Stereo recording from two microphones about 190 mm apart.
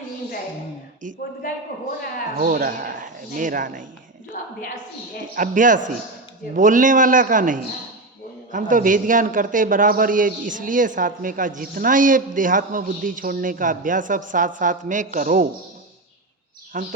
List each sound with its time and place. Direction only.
2.4 s a man's voice: 50° right (ahead or behind)
4.4 s a woman's voice: 40° left (ahead or behind)
5.3 s a man's voice: 45° right (ahead or behind)
16.7 s a man's voice: 45° right (ahead or behind)